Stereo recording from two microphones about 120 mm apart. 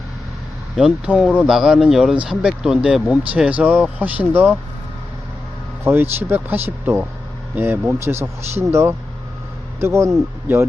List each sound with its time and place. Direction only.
0.8 s speech: 5° right (ahead or behind)
5.8 s speech: 20° right (ahead or behind)